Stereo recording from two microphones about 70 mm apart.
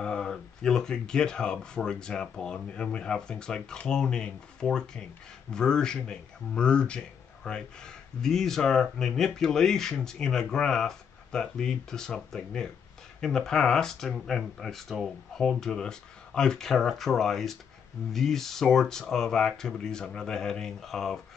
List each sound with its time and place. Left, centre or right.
0.0 s speech: centre